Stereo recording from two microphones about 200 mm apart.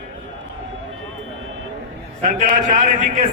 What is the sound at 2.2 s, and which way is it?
A man's voice, 40° right (ahead or behind).